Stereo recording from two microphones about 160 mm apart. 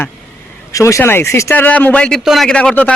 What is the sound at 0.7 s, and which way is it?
Speech, 20° left (ahead or behind).